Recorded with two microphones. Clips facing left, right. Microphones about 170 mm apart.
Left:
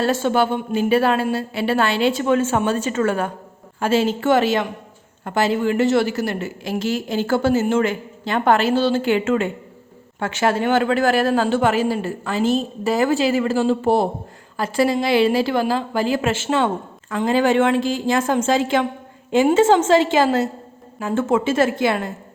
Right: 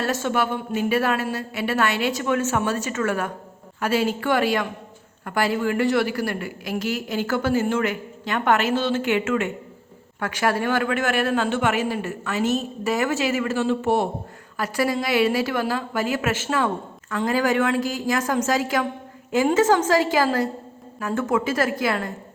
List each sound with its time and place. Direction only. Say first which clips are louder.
0.0 s a woman's voice: left 5 dB; 30° left (ahead or behind)